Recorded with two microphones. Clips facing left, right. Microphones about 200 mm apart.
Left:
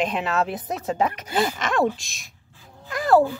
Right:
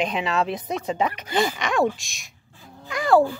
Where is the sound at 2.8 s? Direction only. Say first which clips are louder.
Even; centre (ahead or behind).